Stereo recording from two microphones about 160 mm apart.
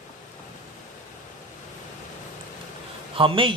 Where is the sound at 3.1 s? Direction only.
35° right (ahead or behind).